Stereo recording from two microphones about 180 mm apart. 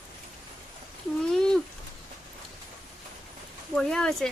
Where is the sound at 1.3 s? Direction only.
5° left (ahead or behind).